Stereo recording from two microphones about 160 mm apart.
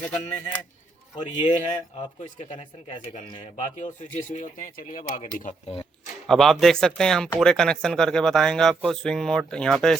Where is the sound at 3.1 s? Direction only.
50° left (ahead or behind).